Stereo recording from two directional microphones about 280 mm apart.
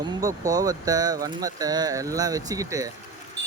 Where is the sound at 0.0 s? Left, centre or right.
Centre.